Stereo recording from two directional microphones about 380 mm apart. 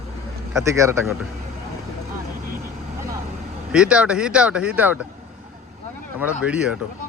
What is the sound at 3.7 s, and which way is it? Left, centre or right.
Speech, centre.